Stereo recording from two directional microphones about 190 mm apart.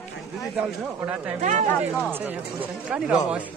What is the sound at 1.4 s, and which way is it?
Speech, 40° right (ahead or behind).